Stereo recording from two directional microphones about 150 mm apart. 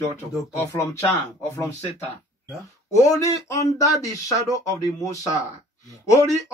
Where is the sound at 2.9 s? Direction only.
20° left (ahead or behind).